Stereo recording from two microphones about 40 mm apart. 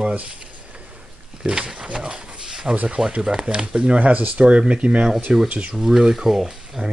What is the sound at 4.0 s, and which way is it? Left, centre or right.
Speech, right.